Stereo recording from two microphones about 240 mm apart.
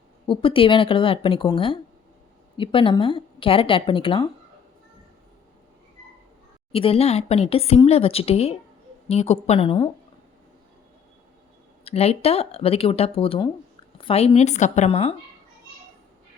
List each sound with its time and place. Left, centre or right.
0.3 s speech: left
6.7 s speech: left
11.9 s speech: left